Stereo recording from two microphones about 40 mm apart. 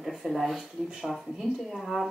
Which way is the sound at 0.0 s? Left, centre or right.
Centre.